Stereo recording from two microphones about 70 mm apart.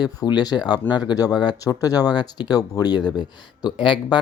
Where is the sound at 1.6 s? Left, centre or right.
Left.